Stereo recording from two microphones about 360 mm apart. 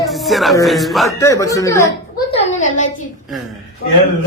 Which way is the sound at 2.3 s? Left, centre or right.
Centre.